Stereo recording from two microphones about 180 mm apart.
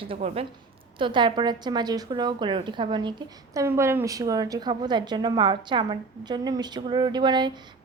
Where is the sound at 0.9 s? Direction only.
25° right (ahead or behind).